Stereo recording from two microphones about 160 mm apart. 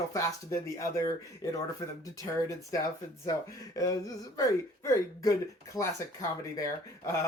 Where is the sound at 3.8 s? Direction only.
20° left (ahead or behind).